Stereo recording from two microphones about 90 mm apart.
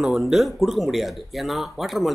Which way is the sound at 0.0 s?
5° right (ahead or behind).